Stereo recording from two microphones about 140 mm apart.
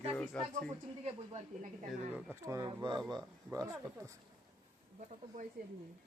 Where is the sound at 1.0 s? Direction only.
50° right (ahead or behind).